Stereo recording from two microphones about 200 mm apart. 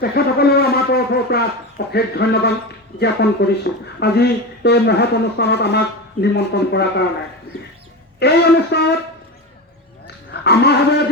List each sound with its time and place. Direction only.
0.0 s speech: 50° left (ahead or behind)
8.2 s speech: 55° left (ahead or behind)
10.4 s speech: 55° left (ahead or behind)